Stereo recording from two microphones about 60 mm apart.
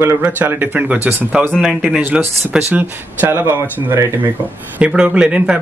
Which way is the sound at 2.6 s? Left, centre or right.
Right.